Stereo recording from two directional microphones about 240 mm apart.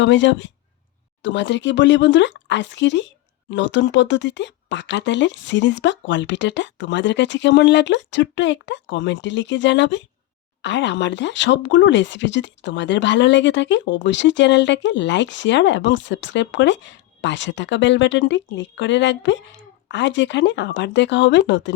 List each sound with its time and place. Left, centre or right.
0.0 s speech: left